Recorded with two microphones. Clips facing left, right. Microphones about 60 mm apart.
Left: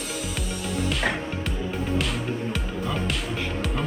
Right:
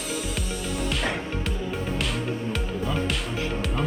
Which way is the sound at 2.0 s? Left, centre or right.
Centre.